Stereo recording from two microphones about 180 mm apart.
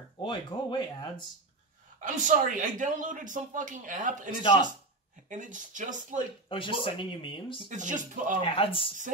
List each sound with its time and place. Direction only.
0.2 s speech: 25° left (ahead or behind)
2.0 s a man's voice: 45° right (ahead or behind)
5.3 s a man's voice: 45° right (ahead or behind)
6.5 s speech: 30° left (ahead or behind)
7.7 s a man's voice: 45° right (ahead or behind)
8.5 s speech: 30° left (ahead or behind)